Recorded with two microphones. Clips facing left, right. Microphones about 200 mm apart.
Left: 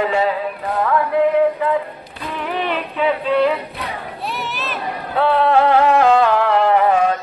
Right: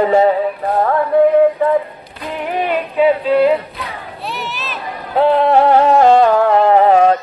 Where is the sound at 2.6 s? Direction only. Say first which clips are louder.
Right 7 dB; 40° right (ahead or behind).